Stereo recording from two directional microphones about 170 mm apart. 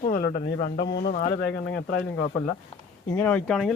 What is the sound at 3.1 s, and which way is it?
Speech, 10° left (ahead or behind).